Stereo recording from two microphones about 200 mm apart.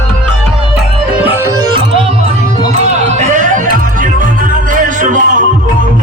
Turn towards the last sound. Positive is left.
turn(degrees=-40)  # may be behind; listen again after turning